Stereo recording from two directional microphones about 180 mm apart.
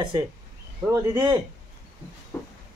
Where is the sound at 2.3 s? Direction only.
10° left (ahead or behind).